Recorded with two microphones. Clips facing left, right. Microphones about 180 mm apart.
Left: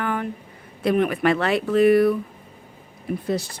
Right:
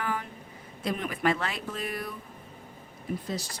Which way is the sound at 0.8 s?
65° left (ahead or behind).